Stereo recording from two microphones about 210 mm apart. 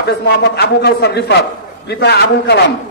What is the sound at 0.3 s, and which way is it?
A man's voice, 50° left (ahead or behind).